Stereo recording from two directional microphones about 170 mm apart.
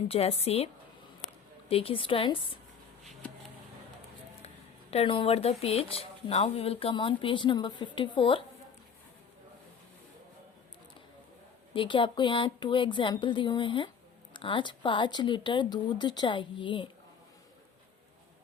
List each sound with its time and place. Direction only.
0.1 s speech: 35° left (ahead or behind)
1.7 s speech: 35° left (ahead or behind)
4.4 s speech: 35° left (ahead or behind)
11.7 s speech: 30° left (ahead or behind)